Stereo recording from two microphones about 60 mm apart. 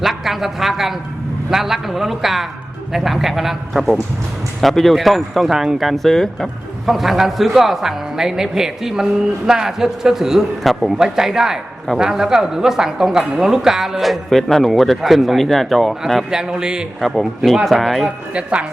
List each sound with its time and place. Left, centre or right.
0.0 s a woman's voice: centre
17.0 s speech: centre